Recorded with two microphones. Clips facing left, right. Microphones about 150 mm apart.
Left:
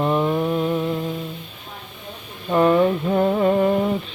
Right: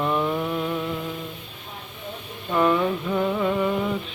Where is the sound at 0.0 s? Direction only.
30° left (ahead or behind).